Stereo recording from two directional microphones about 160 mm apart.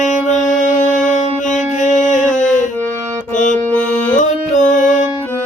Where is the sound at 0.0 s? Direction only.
50° left (ahead or behind).